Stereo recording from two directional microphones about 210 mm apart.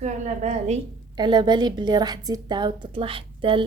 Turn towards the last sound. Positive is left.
turn(degrees=-25)  # may be behind; listen again after turning